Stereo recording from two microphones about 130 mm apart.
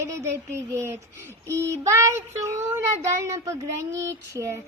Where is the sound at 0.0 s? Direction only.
25° right (ahead or behind).